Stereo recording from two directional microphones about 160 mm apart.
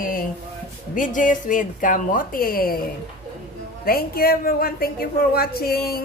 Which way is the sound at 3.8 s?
70° left (ahead or behind).